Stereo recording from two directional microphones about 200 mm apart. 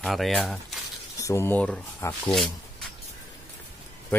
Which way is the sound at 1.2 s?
15° left (ahead or behind).